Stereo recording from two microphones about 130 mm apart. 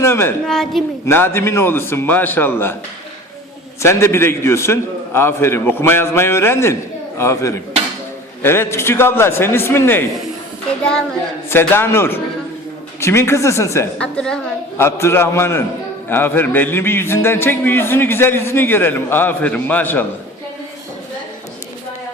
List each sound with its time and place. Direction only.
0.0 s a woman's voice: 20° left (ahead or behind)
0.4 s a woman's voice: 5° left (ahead or behind)
1.0 s a man's voice: 20° left (ahead or behind)
3.8 s a man's voice: 20° left (ahead or behind)
11.4 s a man's voice: 15° left (ahead or behind)
14.0 s a man's voice: 5° left (ahead or behind)
14.8 s a man's voice: 20° left (ahead or behind)